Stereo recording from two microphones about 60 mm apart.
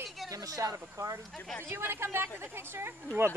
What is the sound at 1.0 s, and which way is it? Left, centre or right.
Speech, right.